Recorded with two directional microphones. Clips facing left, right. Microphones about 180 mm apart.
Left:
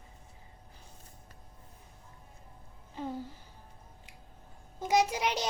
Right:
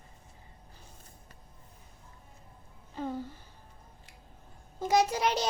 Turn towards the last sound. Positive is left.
turn(degrees=15)  # may be behind; listen again after turning